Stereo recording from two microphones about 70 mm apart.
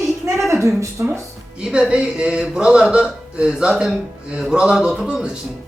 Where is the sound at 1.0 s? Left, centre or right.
Right.